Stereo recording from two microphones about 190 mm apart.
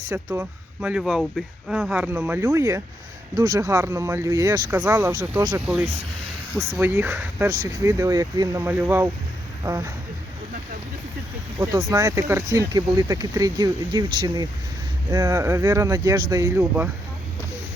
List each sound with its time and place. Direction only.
0.1 s speech: 10° right (ahead or behind)
5.5 s speech: 5° right (ahead or behind)
11.8 s speech: 20° right (ahead or behind)